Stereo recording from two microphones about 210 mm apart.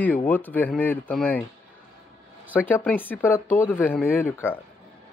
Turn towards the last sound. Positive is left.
turn(degrees=10)  # may be behind; listen again after turning